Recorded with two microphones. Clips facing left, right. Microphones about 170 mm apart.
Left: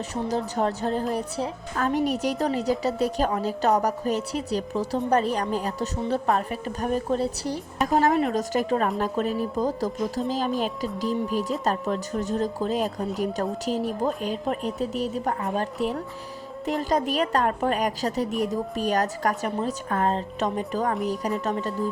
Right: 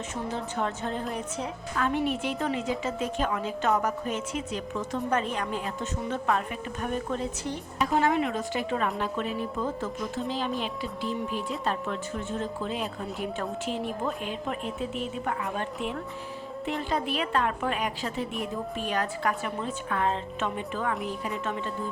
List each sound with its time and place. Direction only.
0.3 s a child's voice: 40° left (ahead or behind)
11.1 s speech: centre (ahead or behind)
11.6 s a child's voice: 40° left (ahead or behind)